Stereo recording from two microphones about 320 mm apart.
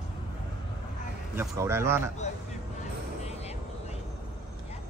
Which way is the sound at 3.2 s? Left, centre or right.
Centre.